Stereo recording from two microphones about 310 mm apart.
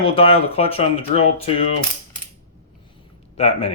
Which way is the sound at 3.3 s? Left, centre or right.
Centre.